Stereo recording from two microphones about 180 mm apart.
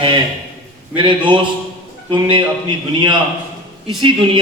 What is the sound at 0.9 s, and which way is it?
A man's voice, 25° right (ahead or behind).